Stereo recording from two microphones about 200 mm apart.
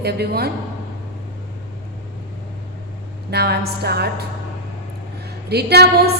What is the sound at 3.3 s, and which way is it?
Speech, 55° right (ahead or behind).